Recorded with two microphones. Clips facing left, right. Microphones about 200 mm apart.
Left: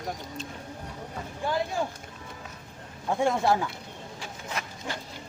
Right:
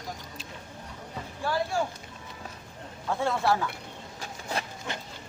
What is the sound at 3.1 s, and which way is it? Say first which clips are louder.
Speech: left 2 dB; 15° left (ahead or behind).